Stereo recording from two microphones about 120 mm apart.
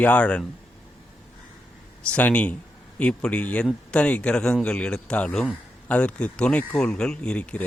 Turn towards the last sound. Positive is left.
turn(degrees=10)  # may be behind; listen again after turning